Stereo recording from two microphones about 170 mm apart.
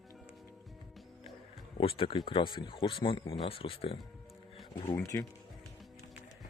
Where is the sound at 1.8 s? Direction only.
35° left (ahead or behind).